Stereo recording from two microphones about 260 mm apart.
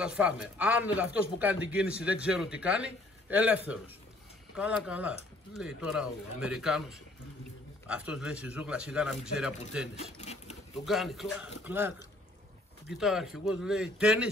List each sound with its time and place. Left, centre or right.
0.0 s speech: centre
10.1 s sewing machine: left
10.9 s speech: centre
12.9 s speech: centre